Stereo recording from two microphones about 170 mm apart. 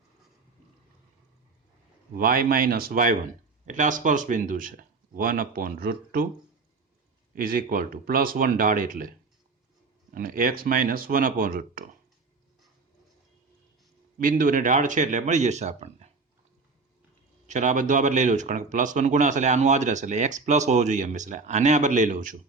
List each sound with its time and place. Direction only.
2.1 s speech: 60° right (ahead or behind)
7.3 s speech: 55° right (ahead or behind)
10.2 s speech: 55° right (ahead or behind)
14.2 s speech: 55° right (ahead or behind)
17.5 s speech: 45° right (ahead or behind)